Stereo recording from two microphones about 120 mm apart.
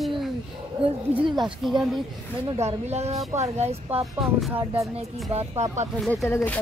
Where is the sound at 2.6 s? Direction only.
65° right (ahead or behind).